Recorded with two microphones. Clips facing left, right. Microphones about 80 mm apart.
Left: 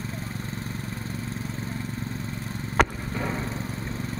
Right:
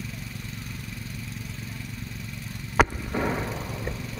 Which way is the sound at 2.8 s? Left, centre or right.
Centre.